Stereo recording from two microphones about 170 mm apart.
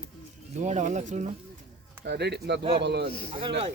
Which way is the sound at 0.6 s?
45° right (ahead or behind).